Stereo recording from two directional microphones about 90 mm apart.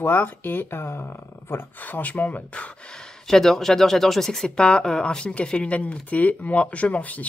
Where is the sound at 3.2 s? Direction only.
5° left (ahead or behind).